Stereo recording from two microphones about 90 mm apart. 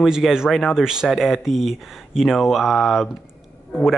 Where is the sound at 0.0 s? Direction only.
5° right (ahead or behind).